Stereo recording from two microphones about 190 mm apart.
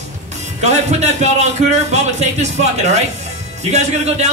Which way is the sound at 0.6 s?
35° right (ahead or behind).